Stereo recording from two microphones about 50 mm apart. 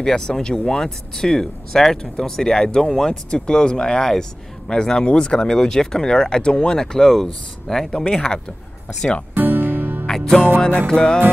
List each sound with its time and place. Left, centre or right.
0.0 s speech: centre
9.3 s music: right
10.0 s music: centre
10.9 s speech: centre